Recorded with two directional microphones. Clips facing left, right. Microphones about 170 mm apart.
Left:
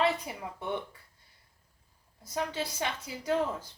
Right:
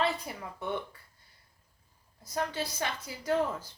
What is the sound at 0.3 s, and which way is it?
Speech, 15° left (ahead or behind).